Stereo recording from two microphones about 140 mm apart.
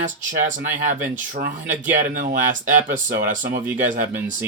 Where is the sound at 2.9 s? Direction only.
70° right (ahead or behind).